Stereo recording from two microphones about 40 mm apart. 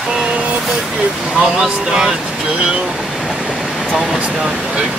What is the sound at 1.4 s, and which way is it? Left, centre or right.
Speech, centre.